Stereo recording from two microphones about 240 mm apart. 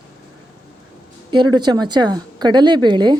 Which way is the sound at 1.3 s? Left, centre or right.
Centre.